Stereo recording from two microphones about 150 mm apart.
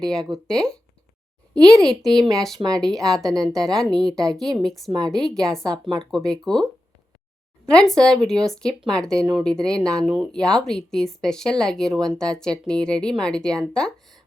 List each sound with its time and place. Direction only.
0.0 s speech: 5° left (ahead or behind)
2.3 s speech: centre (ahead or behind)
2.6 s a woman's voice: 25° right (ahead or behind)
2.8 s speech: 5° left (ahead or behind)
4.9 s a woman's voice: 25° right (ahead or behind)
5.1 s speech: 5° left (ahead or behind)
7.7 s speech: 5° left (ahead or behind)